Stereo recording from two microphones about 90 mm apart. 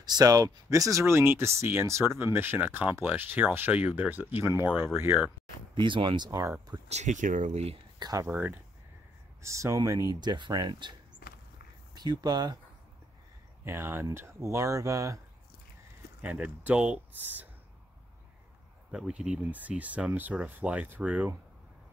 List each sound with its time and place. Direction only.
0.0 s speech: 45° right (ahead or behind); by 5.2 s 25° right (ahead or behind)
5.8 s speech: 65° right (ahead or behind)
8.0 s speech: 40° right (ahead or behind)
8.3 s speech: 20° right (ahead or behind)
9.4 s speech: 35° right (ahead or behind)
10.2 s speech: 55° right (ahead or behind)
13.7 s speech: 25° right (ahead or behind)
16.2 s speech: 15° right (ahead or behind)
18.9 s speech: 5° right (ahead or behind)